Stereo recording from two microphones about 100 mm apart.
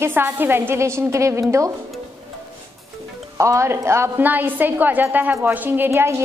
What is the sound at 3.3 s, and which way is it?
A woman's voice, 30° right (ahead or behind).